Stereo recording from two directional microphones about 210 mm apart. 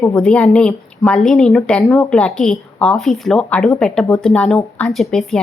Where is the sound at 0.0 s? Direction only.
5° left (ahead or behind).